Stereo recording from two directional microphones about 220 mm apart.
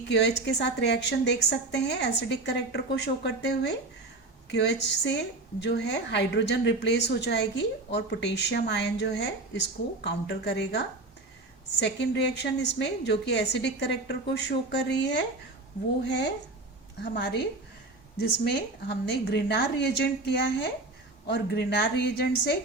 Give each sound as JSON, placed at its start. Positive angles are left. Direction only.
{"t": 0.1, "sound": "a woman's voice", "side_deg": 50}